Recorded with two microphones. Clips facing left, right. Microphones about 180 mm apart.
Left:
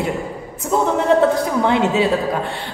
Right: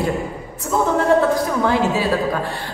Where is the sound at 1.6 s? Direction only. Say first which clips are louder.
Left 3 dB; 20° left (ahead or behind).